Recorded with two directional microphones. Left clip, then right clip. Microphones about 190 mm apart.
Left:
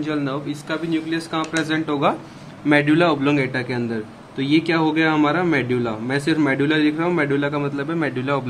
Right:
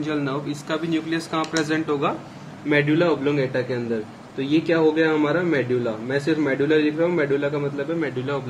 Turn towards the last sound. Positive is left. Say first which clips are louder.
# left 1 dB
turn(degrees=45)  # may be behind; listen again after turning